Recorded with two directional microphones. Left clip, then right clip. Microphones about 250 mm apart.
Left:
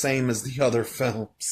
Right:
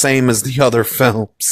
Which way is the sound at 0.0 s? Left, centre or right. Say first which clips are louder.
Right 11 dB; right.